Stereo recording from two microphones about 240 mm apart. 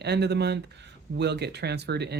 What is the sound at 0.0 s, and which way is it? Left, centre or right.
Speech, right.